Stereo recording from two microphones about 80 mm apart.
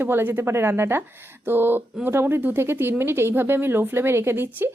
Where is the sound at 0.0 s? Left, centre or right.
Right.